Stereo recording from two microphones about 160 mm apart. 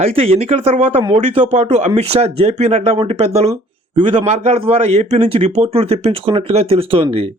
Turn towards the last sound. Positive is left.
turn(degrees=-35)  # may be behind; listen again after turning